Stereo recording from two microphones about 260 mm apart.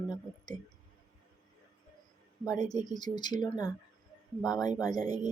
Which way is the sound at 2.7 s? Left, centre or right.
Centre.